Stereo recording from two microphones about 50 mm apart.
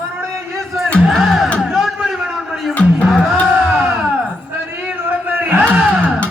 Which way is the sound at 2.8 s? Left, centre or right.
Centre.